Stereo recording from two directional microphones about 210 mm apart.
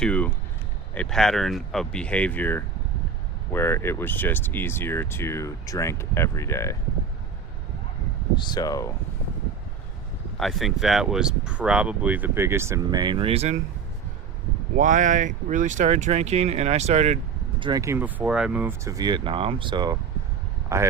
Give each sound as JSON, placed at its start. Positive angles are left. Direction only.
{"t": 0.0, "sound": "a sound", "side_deg": 5}
{"t": 0.9, "sound": "speech", "side_deg": 0}
{"t": 8.4, "sound": "speech", "side_deg": 20}
{"t": 10.3, "sound": "speech", "side_deg": 0}
{"t": 14.8, "sound": "speech", "side_deg": -35}
{"t": 17.6, "sound": "speech", "side_deg": -20}